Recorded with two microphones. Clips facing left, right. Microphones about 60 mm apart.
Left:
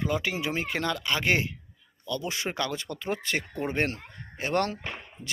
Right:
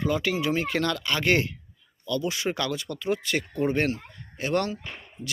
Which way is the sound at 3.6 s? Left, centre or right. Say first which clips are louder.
Right 4 dB; left.